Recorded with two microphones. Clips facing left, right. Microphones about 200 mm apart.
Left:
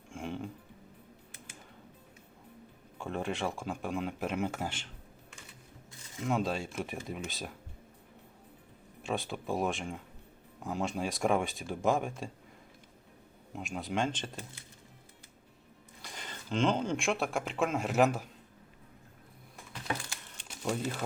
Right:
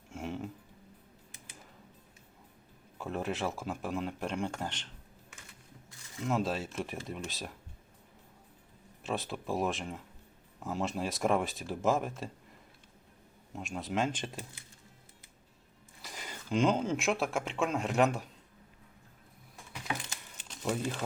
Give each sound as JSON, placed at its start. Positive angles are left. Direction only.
{"t": 0.1, "sound": "music", "side_deg": -5}
{"t": 3.0, "sound": "speech", "side_deg": -5}
{"t": 6.2, "sound": "speech", "side_deg": 0}
{"t": 9.0, "sound": "speech", "side_deg": 0}
{"t": 13.5, "sound": "speech", "side_deg": 0}
{"t": 16.0, "sound": "speech", "side_deg": -5}
{"t": 19.7, "sound": "a sound", "side_deg": -20}